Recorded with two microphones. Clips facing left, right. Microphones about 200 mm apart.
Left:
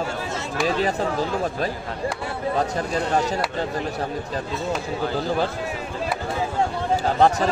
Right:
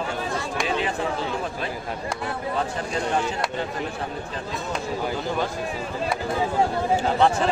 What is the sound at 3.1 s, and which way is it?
Speech, 40° left (ahead or behind).